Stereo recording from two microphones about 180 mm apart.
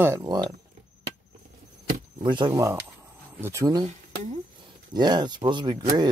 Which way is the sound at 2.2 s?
25° right (ahead or behind).